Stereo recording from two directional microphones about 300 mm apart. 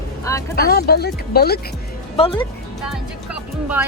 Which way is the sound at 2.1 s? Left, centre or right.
Centre.